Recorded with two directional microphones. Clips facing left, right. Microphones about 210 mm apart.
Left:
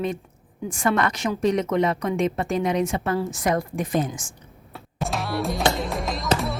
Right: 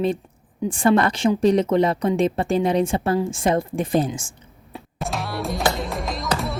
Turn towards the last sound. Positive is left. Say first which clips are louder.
# even
turn(degrees=0)  # may be behind; listen again after turning